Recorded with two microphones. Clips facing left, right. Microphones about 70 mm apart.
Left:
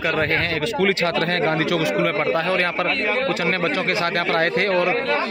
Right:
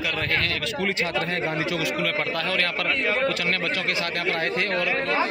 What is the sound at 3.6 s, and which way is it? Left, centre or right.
A man's voice, left.